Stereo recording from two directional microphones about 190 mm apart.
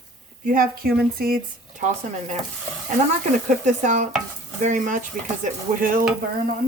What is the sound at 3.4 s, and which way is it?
Speech, 40° right (ahead or behind).